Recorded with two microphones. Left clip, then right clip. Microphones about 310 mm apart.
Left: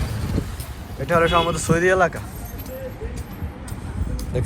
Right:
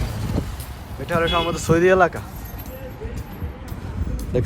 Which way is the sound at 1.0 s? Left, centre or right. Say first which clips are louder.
Left 3 dB; centre.